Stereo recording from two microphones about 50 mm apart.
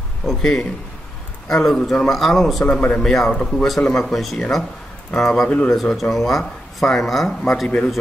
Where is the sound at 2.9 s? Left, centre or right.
Centre.